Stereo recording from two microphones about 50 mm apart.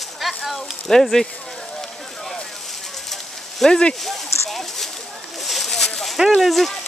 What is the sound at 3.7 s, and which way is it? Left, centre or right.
Speech, centre.